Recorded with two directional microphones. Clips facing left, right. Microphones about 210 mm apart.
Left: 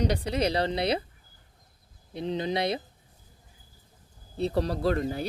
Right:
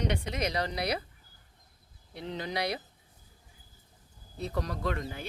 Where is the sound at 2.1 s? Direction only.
20° left (ahead or behind).